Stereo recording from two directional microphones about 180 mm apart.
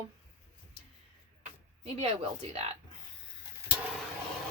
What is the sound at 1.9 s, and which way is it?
Speech, 35° right (ahead or behind).